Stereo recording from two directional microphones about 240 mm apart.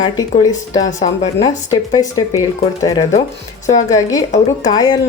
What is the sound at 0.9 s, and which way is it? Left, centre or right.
Speech, left.